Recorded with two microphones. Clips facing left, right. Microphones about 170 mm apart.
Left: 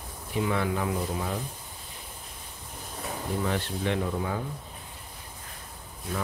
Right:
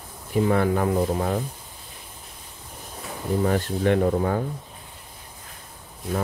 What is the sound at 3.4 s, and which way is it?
Speech, 45° right (ahead or behind).